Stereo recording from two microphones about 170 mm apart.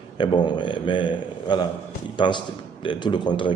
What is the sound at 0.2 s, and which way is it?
A man's voice, 30° left (ahead or behind).